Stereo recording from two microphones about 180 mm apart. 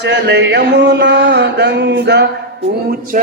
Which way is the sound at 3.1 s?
45° right (ahead or behind).